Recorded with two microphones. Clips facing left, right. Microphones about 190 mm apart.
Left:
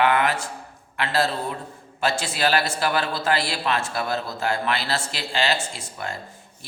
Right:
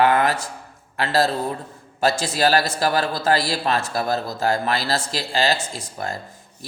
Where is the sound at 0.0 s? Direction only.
40° right (ahead or behind).